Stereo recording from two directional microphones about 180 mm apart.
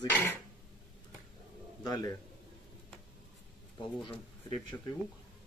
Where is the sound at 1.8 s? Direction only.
20° left (ahead or behind).